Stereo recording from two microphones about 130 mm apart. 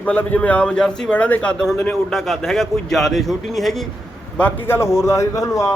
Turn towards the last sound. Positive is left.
turn(degrees=25)  # may be behind; listen again after turning